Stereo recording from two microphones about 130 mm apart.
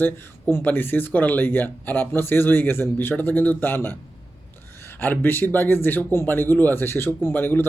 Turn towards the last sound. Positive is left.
turn(degrees=15)  # may be behind; listen again after turning